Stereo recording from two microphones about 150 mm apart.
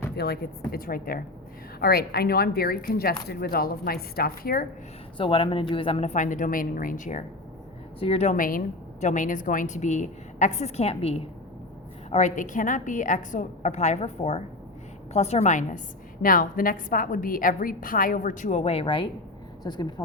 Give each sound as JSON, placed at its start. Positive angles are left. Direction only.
{"t": 0.2, "sound": "a woman's voice", "side_deg": 90}
{"t": 1.8, "sound": "a woman's voice", "side_deg": 90}
{"t": 5.1, "sound": "speech", "side_deg": 35}
{"t": 6.1, "sound": "a woman's voice", "side_deg": 60}
{"t": 7.9, "sound": "speech", "side_deg": 40}
{"t": 8.4, "sound": "a woman's voice", "side_deg": 65}
{"t": 12.1, "sound": "a woman's voice", "side_deg": 55}
{"t": 16.2, "sound": "a woman's voice", "side_deg": 70}